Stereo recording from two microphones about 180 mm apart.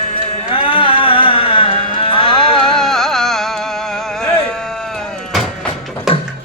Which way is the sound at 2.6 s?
Centre (ahead or behind).